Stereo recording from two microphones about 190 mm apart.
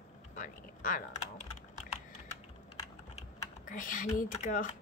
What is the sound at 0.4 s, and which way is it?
Speech, 45° left (ahead or behind).